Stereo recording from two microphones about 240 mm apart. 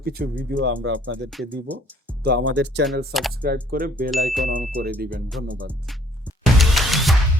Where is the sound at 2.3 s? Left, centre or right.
Right.